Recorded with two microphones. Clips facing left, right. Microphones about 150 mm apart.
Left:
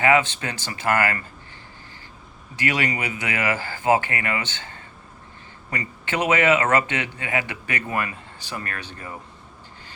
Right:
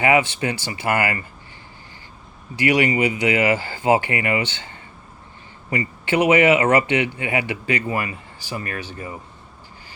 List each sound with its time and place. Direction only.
0.0 s speech: 15° right (ahead or behind)
2.6 s speech: 15° right (ahead or behind)